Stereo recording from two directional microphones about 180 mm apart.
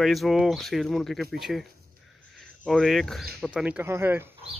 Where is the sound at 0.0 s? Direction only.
Centre (ahead or behind).